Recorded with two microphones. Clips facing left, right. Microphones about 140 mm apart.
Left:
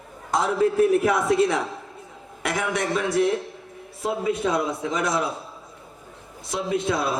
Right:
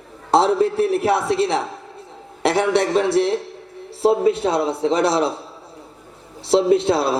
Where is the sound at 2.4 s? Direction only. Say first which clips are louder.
Right 8 dB; 30° right (ahead or behind).